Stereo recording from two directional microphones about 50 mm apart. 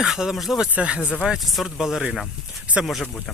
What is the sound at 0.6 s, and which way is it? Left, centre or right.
Speech, right.